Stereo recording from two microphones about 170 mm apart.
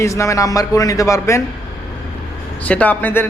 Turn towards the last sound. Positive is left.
turn(degrees=10)  # may be behind; listen again after turning